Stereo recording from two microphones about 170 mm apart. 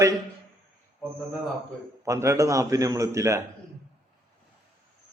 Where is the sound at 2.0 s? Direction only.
20° right (ahead or behind).